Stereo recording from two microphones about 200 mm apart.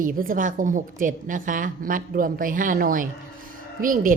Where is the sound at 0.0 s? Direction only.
45° right (ahead or behind).